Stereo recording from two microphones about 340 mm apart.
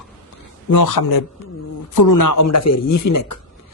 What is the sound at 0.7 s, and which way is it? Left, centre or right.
A man's voice, left.